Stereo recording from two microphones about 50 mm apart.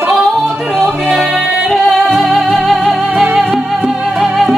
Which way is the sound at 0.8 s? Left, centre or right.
Centre.